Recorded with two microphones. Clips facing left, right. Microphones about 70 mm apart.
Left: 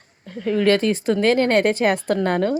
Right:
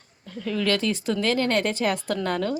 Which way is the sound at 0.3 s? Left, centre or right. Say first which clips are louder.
Left 7 dB; left.